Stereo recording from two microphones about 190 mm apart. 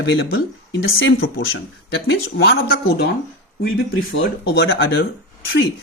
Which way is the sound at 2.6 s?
50° left (ahead or behind).